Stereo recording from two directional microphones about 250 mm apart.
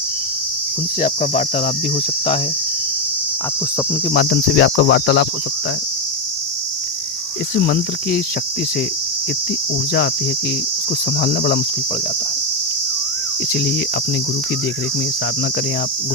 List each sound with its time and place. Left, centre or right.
1.0 s cricket: left
4.1 s speech: left
11.2 s cricket: left